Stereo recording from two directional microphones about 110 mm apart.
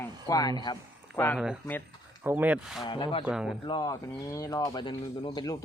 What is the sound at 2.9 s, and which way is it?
Speech, 45° left (ahead or behind).